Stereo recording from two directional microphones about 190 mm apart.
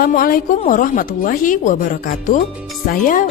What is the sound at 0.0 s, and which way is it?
Speech, 50° left (ahead or behind).